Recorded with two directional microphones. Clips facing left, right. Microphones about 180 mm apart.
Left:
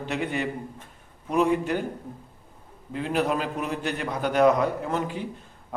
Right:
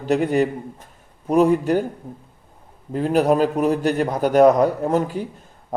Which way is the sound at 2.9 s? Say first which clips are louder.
Right 8 dB; 40° right (ahead or behind).